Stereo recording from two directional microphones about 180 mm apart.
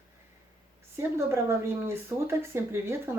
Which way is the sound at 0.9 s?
15° right (ahead or behind).